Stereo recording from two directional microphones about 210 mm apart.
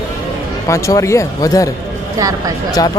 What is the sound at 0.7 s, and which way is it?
A man's voice, 15° left (ahead or behind).